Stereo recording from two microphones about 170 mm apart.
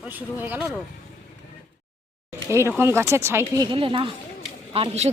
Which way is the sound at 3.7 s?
30° right (ahead or behind).